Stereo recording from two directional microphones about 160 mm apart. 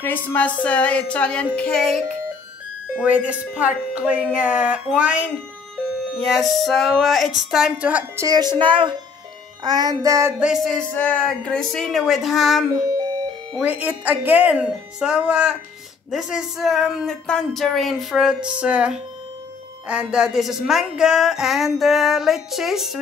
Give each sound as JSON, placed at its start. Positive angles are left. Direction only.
{"t": 0.0, "sound": "a woman's voice", "side_deg": 10}
{"t": 8.2, "sound": "speech", "side_deg": -25}
{"t": 10.4, "sound": "speech", "side_deg": 0}
{"t": 12.8, "sound": "a sound", "side_deg": -20}
{"t": 13.6, "sound": "speech", "side_deg": -10}